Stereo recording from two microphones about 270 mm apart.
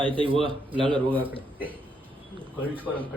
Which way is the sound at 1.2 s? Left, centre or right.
Centre.